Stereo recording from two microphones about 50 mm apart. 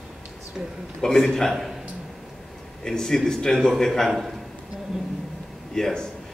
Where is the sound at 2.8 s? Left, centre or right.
Centre.